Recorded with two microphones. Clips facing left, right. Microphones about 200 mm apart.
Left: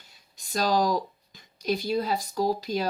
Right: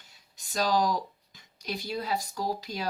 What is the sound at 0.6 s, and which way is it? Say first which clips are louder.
Speech: left 2 dB; 40° left (ahead or behind).